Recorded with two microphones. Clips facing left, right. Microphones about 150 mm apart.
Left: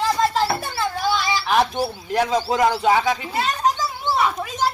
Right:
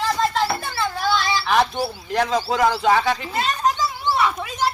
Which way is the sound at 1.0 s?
15° left (ahead or behind).